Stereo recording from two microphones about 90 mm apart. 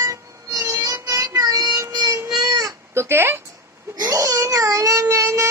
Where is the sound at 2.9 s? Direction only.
30° right (ahead or behind).